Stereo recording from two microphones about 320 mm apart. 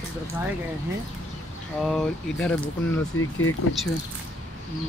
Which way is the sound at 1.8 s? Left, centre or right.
Centre.